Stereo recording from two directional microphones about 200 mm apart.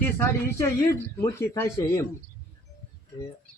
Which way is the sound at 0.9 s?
15° left (ahead or behind).